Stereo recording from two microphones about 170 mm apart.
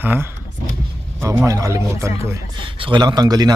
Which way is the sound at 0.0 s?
10° right (ahead or behind).